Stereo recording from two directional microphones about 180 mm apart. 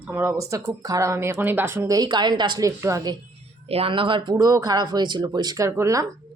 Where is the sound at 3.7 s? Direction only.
30° right (ahead or behind); by 6.1 s 15° right (ahead or behind).